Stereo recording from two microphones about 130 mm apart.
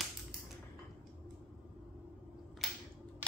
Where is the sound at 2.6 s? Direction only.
Centre (ahead or behind).